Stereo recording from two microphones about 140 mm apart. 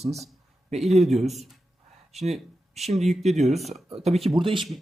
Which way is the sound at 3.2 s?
55° right (ahead or behind).